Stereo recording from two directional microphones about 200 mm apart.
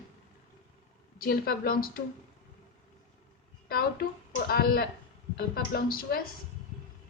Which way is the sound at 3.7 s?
50° left (ahead or behind).